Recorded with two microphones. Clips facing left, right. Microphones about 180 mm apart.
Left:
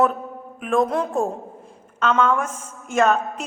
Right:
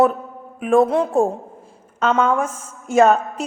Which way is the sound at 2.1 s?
35° right (ahead or behind).